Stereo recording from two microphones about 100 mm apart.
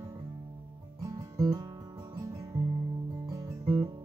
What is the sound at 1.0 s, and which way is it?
Music, 35° right (ahead or behind).